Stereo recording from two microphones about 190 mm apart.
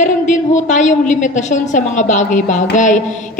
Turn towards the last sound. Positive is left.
turn(degrees=40)  # may be behind; listen again after turning